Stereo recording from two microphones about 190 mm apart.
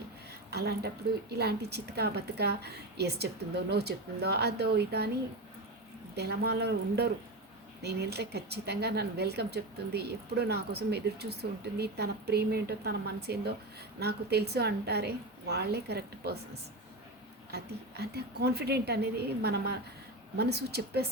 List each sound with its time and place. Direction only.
0.5 s a woman's voice: 60° right (ahead or behind)
6.1 s a woman's voice: 60° right (ahead or behind)
17.5 s a woman's voice: 60° right (ahead or behind)